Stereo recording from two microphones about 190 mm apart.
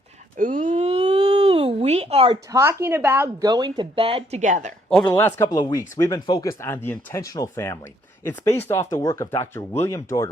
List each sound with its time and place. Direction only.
0.3 s a sound: 45° right (ahead or behind)
2.5 s speech: 15° right (ahead or behind)
3.5 s speech: 25° right (ahead or behind); by 4.7 s 40° right (ahead or behind)
4.9 s speech: 5° left (ahead or behind)